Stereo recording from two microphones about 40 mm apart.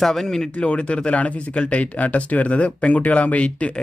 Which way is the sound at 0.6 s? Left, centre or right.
Left.